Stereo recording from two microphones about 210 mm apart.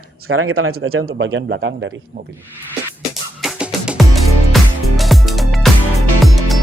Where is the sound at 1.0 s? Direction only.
60° right (ahead or behind).